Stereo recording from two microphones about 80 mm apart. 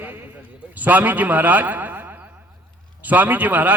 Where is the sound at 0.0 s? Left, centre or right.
Right.